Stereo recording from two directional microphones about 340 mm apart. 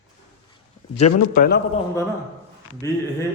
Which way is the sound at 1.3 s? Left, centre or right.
Left.